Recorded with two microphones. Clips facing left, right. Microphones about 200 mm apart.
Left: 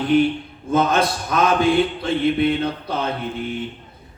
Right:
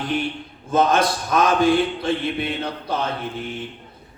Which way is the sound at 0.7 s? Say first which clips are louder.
Even; 55° left (ahead or behind).